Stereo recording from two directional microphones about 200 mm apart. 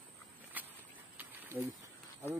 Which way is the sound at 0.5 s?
10° right (ahead or behind).